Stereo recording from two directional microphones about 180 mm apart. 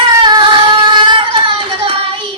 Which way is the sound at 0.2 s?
25° right (ahead or behind).